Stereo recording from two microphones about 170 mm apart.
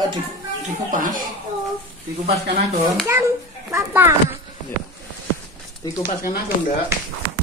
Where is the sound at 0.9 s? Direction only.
50° right (ahead or behind).